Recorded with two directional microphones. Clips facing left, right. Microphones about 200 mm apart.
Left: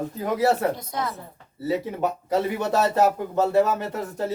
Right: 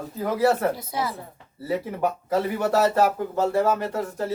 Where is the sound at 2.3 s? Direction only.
20° left (ahead or behind).